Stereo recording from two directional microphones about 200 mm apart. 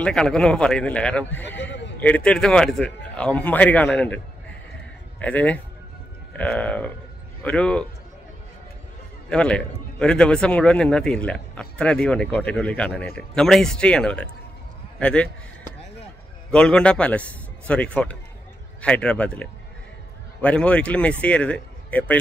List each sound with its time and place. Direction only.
0.0 s a man's voice: 5° left (ahead or behind)
1.6 s speech: 60° left (ahead or behind)
2.0 s a man's voice: 5° left (ahead or behind)
5.2 s a man's voice: 5° left (ahead or behind)
9.3 s a man's voice: 5° left (ahead or behind)
16.4 s a man's voice: 5° left (ahead or behind)